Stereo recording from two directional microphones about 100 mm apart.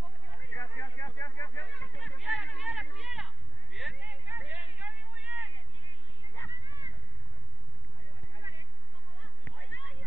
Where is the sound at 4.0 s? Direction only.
15° right (ahead or behind).